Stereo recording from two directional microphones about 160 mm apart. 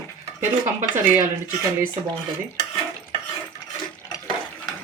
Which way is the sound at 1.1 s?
15° right (ahead or behind).